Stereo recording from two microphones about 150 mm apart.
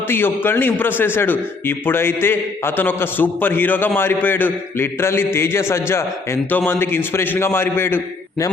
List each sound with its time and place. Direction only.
0.1 s a man's voice: 15° left (ahead or behind)